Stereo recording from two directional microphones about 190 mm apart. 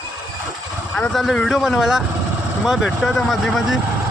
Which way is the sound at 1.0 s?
Centre (ahead or behind).